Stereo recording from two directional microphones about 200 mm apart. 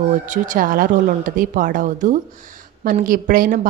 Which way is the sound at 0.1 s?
40° right (ahead or behind).